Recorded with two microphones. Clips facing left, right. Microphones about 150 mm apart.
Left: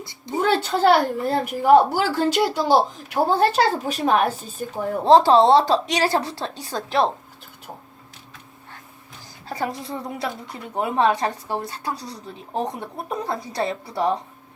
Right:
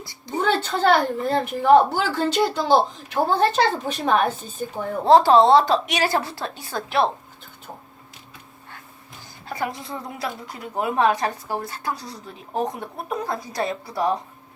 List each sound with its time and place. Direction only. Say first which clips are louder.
0.0 s a woman's voice: left 3 dB; 25° left (ahead or behind)
0.3 s a woman's voice: left 2 dB; 10° left (ahead or behind)
5.1 s a woman's voice: even; 30° left (ahead or behind)
9.5 s a woman's voice: left 1 dB; 35° left (ahead or behind)